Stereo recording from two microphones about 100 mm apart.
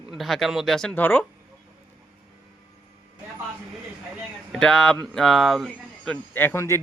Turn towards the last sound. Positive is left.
turn(degrees=30)  # may be behind; listen again after turning